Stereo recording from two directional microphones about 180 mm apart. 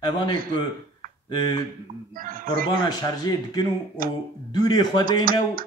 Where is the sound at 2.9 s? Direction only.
20° left (ahead or behind).